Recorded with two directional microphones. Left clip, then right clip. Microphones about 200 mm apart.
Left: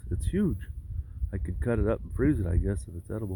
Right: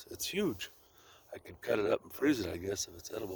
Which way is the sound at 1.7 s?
25° right (ahead or behind).